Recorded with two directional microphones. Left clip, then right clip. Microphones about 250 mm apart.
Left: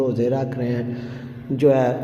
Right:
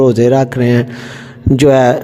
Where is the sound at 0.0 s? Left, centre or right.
Right.